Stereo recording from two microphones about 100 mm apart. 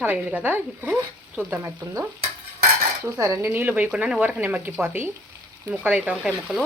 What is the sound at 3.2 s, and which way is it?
A woman's voice, 30° right (ahead or behind).